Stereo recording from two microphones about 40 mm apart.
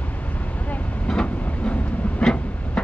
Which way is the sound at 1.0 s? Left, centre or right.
Left.